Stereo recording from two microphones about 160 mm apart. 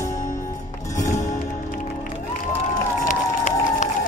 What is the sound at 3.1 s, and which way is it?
Run, 50° left (ahead or behind).